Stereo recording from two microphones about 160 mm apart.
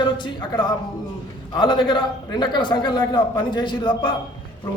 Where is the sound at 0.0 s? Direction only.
30° left (ahead or behind).